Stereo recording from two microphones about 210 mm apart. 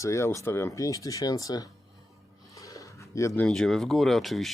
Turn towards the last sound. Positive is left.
turn(degrees=0)  # may be behind; listen again after turning